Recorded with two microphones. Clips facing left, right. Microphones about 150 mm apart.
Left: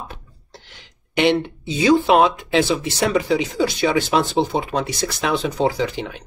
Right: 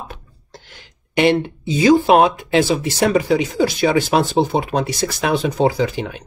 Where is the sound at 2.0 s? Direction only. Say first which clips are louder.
Right 2 dB; 45° right (ahead or behind).